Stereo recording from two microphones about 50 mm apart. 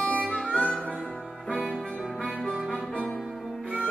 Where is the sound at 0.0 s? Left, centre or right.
Left.